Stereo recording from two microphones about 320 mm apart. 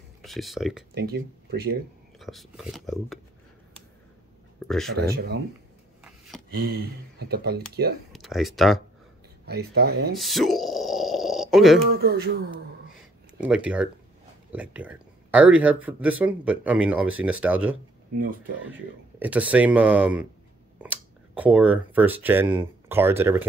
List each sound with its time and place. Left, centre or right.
0.2 s speech: centre
0.9 s speech: right
2.1 s speech: centre
4.6 s speech: centre
4.9 s speech: right
6.0 s a sound: centre
6.7 s speech: right
8.1 s speech: centre
9.5 s speech: right
10.1 s grunt: centre
12.0 s speech: right
13.4 s speech: centre
18.1 s speech: right
19.1 s speech: centre